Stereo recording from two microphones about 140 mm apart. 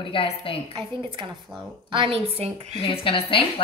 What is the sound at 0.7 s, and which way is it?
A woman's voice, 35° right (ahead or behind).